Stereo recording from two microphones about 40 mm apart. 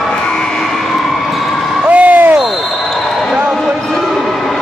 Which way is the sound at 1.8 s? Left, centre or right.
Right.